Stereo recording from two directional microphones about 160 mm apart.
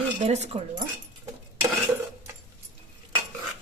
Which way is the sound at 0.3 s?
40° right (ahead or behind).